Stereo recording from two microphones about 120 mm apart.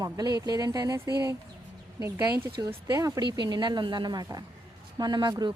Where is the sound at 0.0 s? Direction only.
35° right (ahead or behind).